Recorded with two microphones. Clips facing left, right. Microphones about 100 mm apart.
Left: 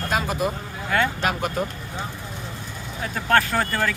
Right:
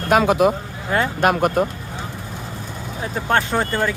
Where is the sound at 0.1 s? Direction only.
70° right (ahead or behind).